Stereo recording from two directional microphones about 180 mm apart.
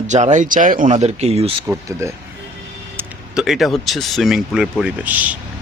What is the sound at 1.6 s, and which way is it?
Speech, 15° right (ahead or behind).